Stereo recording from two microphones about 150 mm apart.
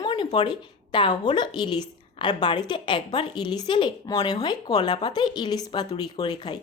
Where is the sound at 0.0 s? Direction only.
30° left (ahead or behind).